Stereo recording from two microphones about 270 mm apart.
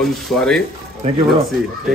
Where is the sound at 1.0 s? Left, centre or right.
Right.